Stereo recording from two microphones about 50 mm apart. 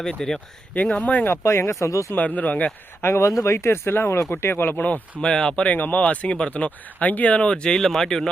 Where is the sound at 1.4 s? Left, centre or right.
Left.